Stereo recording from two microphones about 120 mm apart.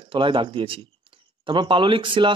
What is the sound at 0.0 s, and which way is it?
Speech, 45° right (ahead or behind).